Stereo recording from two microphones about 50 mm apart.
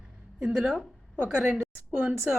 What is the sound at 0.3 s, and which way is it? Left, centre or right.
A woman's voice, right.